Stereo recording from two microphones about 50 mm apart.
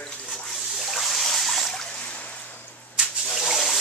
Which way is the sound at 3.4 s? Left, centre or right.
Centre.